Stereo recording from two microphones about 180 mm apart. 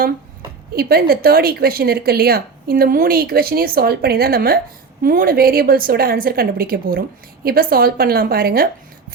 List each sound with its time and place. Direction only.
0.8 s speech: 60° right (ahead or behind)